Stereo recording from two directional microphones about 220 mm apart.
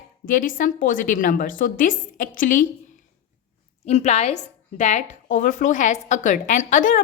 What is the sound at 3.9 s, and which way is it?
A woman's voice, 30° left (ahead or behind).